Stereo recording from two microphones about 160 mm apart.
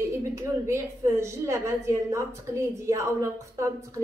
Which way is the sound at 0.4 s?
15° right (ahead or behind).